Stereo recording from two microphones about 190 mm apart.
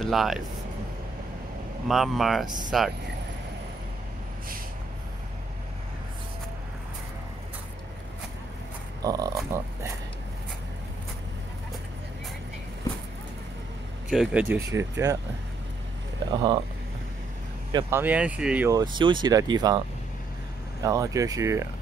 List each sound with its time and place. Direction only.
0.0 s speech: centre (ahead or behind)
1.9 s speech: centre (ahead or behind)
2.4 s speech: 20° right (ahead or behind)
9.0 s speech: 20° right (ahead or behind)
14.0 s speech: 5° right (ahead or behind)
16.3 s speech: 25° right (ahead or behind)
17.7 s speech: 15° right (ahead or behind)
18.7 s speech: 20° right (ahead or behind)
20.8 s speech: 15° right (ahead or behind)